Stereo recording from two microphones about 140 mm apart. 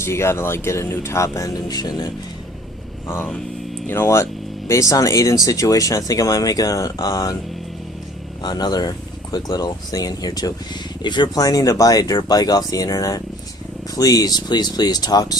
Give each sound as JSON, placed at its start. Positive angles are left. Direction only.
{"t": 0.0, "sound": "speech", "side_deg": 20}
{"t": 3.8, "sound": "speech", "side_deg": 15}
{"t": 8.4, "sound": "speech", "side_deg": 30}